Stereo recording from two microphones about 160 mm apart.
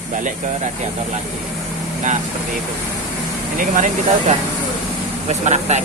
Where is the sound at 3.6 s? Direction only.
55° right (ahead or behind).